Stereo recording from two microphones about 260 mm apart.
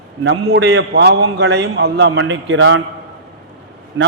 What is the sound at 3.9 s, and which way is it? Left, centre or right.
Speech, right.